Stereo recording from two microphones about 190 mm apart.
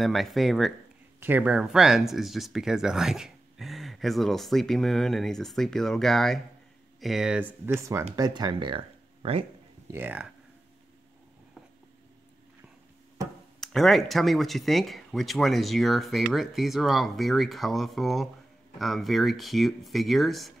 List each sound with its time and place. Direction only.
0.0 s speech: centre (ahead or behind); by 9.5 s 30° right (ahead or behind)
9.8 s speech: 10° right (ahead or behind)
13.6 s speech: centre (ahead or behind)